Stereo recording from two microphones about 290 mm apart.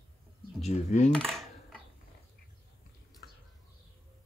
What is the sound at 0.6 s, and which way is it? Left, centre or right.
Speech, left.